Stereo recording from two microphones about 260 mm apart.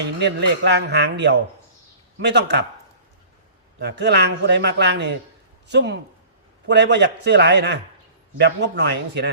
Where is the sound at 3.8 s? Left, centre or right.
Right.